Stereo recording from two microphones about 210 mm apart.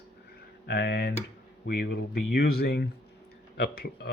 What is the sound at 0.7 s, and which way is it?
Speech, 50° left (ahead or behind).